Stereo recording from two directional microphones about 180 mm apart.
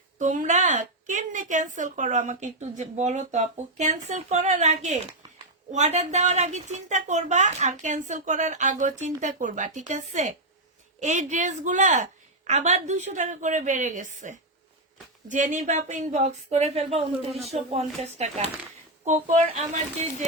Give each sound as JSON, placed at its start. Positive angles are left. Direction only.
{"t": 0.2, "sound": "a woman's voice", "side_deg": -45}